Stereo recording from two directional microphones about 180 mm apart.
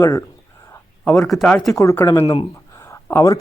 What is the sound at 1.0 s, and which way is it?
Speech, centre (ahead or behind).